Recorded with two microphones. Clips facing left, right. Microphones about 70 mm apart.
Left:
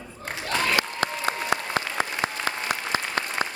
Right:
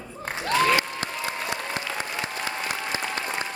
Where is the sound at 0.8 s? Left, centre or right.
Left.